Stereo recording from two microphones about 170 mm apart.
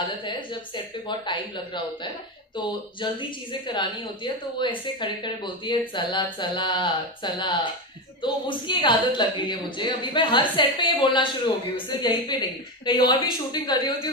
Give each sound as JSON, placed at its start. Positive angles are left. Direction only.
{"t": 0.3, "sound": "speech", "side_deg": 25}
{"t": 2.5, "sound": "speech", "side_deg": 30}